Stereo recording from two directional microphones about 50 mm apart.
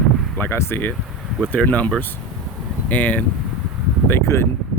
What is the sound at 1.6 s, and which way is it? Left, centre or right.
Speech, left.